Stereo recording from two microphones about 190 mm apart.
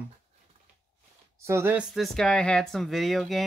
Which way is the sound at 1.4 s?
15° right (ahead or behind).